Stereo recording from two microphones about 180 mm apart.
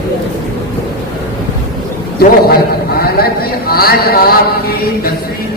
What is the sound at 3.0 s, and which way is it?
A man's voice, 55° left (ahead or behind).